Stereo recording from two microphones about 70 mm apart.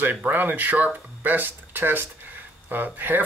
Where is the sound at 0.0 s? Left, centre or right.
Right.